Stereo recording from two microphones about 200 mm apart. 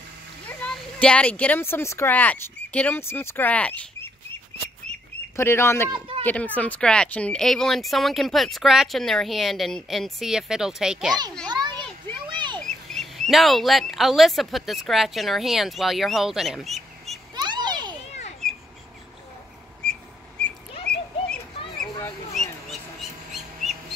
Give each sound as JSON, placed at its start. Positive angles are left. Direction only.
{"t": 0.5, "sound": "speech", "side_deg": 5}
{"t": 5.9, "sound": "speech", "side_deg": -25}
{"t": 6.2, "sound": "speech", "side_deg": 5}
{"t": 11.4, "sound": "children playing", "side_deg": -20}
{"t": 12.5, "sound": "speech", "side_deg": 0}
{"t": 17.4, "sound": "children playing", "side_deg": -20}
{"t": 18.4, "sound": "bird", "side_deg": 0}
{"t": 19.8, "sound": "a sound", "side_deg": 5}
{"t": 20.4, "sound": "bird", "side_deg": 5}